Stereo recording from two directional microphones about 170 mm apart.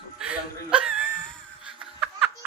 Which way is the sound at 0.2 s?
5° right (ahead or behind).